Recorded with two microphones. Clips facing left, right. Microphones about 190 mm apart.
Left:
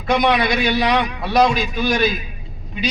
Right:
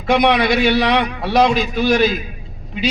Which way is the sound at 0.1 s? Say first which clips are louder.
Right 3 dB; 25° right (ahead or behind).